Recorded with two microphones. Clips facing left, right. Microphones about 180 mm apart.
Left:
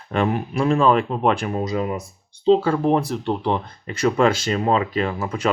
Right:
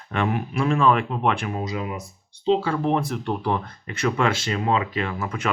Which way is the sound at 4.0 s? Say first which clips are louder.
Left 5 dB; 35° left (ahead or behind).